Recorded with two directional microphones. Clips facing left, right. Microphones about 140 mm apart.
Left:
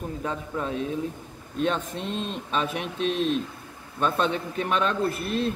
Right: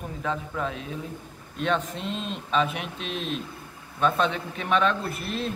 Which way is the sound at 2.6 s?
40° left (ahead or behind).